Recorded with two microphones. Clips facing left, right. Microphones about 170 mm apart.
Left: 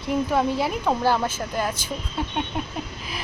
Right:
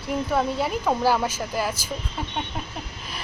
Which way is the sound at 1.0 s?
10° right (ahead or behind).